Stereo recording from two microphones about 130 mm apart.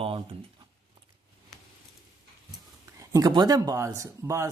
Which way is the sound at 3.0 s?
25° right (ahead or behind).